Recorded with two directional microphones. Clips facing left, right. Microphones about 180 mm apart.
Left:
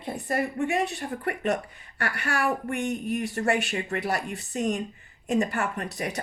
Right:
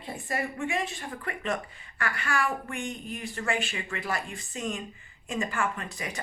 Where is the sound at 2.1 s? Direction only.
65° left (ahead or behind).